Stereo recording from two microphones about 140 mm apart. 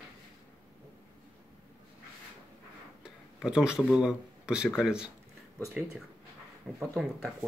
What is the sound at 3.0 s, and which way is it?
Speech, 5° right (ahead or behind).